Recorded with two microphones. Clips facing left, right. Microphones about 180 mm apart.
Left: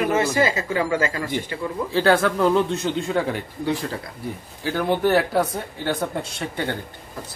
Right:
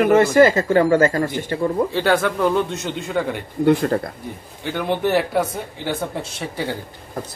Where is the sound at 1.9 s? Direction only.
Centre (ahead or behind).